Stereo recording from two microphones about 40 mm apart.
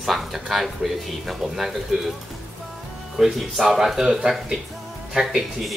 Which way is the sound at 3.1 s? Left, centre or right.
Centre.